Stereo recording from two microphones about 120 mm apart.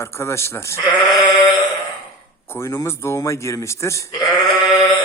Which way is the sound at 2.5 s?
20° left (ahead or behind).